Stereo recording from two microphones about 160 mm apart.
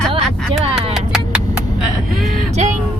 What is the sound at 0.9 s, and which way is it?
Vehicle, 5° right (ahead or behind).